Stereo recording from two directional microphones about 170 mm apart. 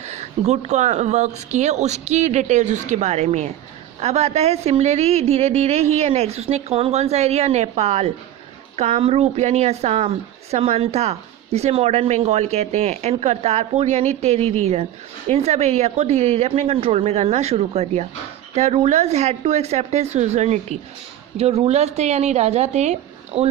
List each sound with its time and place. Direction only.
0.0 s a woman's voice: 40° right (ahead or behind)